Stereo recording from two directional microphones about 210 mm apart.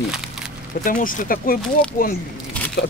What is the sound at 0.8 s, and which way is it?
Speech, 40° left (ahead or behind).